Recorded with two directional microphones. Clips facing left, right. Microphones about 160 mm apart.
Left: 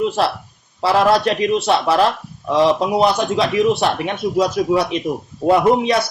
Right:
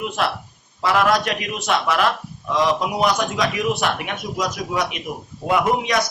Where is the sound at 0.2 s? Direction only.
30° left (ahead or behind).